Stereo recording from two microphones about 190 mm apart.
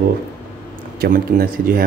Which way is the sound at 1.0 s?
50° right (ahead or behind).